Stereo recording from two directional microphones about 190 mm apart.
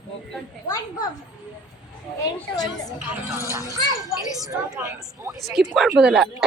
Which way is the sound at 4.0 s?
20° right (ahead or behind).